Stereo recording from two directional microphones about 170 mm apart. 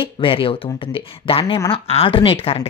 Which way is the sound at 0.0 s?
30° left (ahead or behind).